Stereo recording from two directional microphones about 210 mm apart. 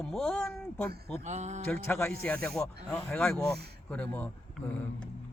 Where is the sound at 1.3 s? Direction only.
35° right (ahead or behind).